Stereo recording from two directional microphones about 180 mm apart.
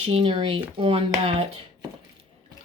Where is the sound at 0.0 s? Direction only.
30° right (ahead or behind).